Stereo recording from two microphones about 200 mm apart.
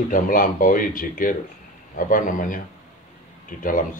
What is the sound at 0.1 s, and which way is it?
Speech, 45° left (ahead or behind).